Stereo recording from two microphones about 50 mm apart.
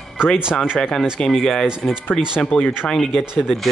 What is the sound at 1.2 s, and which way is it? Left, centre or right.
Speech, centre.